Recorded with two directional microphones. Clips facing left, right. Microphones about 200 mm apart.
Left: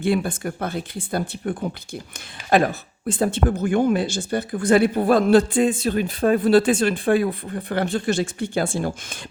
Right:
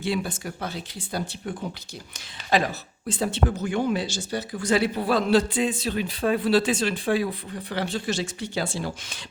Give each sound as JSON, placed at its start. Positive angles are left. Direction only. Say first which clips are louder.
{"t": 0.0, "sound": "speech", "louder": "left 6 dB", "side_deg": 55}